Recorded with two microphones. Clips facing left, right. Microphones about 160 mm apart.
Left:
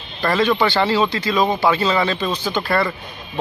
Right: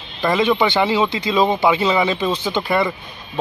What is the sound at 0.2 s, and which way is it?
Speech, 15° right (ahead or behind).